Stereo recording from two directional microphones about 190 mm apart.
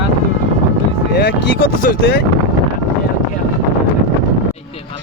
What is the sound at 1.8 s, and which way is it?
Speech, 55° left (ahead or behind).